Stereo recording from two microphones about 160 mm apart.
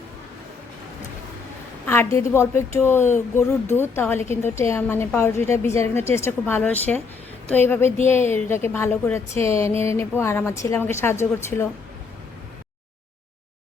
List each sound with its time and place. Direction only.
1.9 s speech: 15° left (ahead or behind)